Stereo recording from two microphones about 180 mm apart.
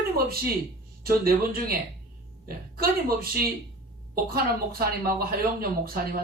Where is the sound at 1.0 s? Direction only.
55° right (ahead or behind).